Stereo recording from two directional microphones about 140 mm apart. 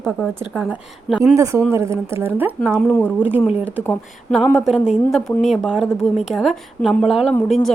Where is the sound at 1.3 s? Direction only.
20° right (ahead or behind).